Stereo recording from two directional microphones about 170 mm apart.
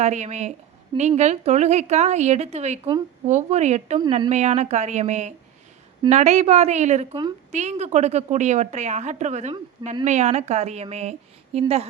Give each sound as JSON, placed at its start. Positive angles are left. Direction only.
{"t": 0.0, "sound": "a woman's voice", "side_deg": -40}